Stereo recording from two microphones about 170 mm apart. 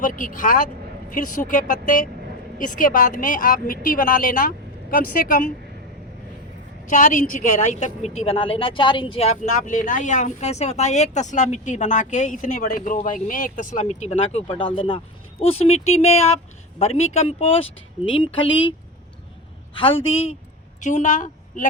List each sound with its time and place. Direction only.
0.0 s a woman's voice: 50° left (ahead or behind)
6.9 s a woman's voice: 50° left (ahead or behind); by 18.7 s 30° left (ahead or behind)
19.7 s speech: 30° left (ahead or behind)
20.8 s a woman's voice: 45° left (ahead or behind)